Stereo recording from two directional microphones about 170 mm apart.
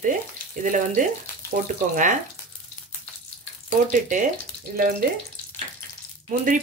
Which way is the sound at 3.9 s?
50° right (ahead or behind).